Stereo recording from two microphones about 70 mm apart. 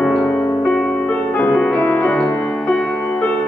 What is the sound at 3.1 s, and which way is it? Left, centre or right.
Music, centre.